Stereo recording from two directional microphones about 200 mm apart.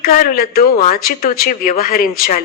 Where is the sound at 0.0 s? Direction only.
45° left (ahead or behind).